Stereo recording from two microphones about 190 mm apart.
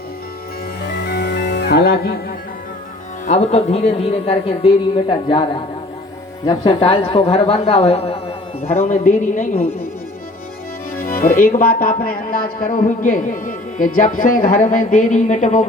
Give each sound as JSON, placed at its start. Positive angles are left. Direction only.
{"t": 0.9, "sound": "music", "side_deg": 55}
{"t": 3.2, "sound": "speech", "side_deg": 35}
{"t": 11.0, "sound": "music", "side_deg": 50}
{"t": 11.4, "sound": "a man's voice", "side_deg": 50}